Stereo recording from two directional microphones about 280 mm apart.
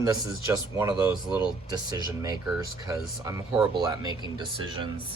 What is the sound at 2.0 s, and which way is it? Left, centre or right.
Speech, centre.